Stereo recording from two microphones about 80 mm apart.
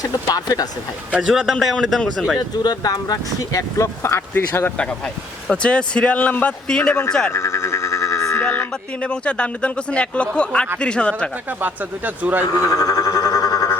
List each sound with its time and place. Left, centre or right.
0.0 s speech: left
1.3 s a man's voice: centre
2.6 s speech: left
4.0 s speech: left
4.8 s speech: centre
7.3 s a sound: left
8.4 s speech: centre
11.4 s speech: right
12.5 s music: left